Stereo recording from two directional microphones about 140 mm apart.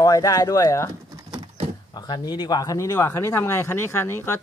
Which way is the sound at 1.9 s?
30° left (ahead or behind).